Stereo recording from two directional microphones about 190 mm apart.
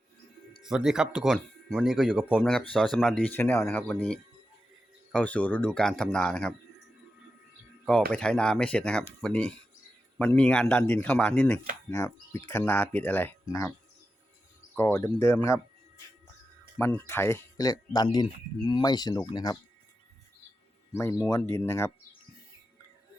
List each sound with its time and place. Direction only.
0.6 s speech: 5° right (ahead or behind)
8.1 s speech: 5° left (ahead or behind)
14.8 s speech: 15° left (ahead or behind)
16.7 s speech: 10° left (ahead or behind)
20.9 s speech: 15° left (ahead or behind)